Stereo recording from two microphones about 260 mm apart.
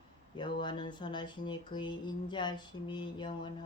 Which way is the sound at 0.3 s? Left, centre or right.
Centre.